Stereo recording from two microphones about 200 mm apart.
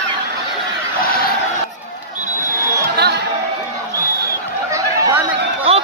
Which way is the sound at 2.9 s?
55° right (ahead or behind).